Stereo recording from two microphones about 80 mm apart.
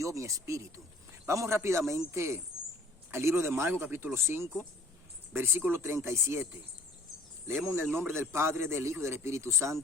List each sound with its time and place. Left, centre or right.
0.0 s a man's voice: right
7.8 s a man's voice: right